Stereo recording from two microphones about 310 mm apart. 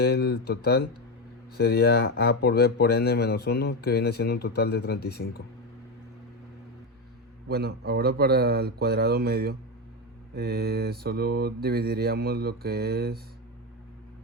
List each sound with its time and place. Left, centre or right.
0.0 s speech: left
7.4 s mantra: right